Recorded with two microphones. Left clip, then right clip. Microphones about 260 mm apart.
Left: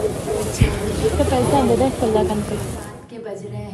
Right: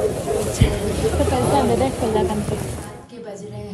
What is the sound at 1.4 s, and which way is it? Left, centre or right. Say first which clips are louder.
Speech: left 1 dB; left.